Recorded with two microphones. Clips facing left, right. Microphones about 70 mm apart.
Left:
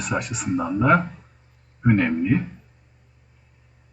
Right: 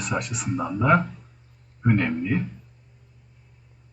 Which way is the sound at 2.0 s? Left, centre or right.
Left.